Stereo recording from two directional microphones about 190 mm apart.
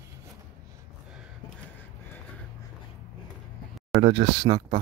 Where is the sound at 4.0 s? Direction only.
70° right (ahead or behind).